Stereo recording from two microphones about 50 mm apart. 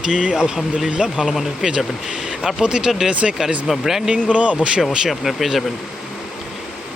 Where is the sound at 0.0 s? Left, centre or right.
Centre.